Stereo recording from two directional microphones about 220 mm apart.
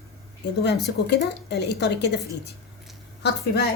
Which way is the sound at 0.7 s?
50° left (ahead or behind).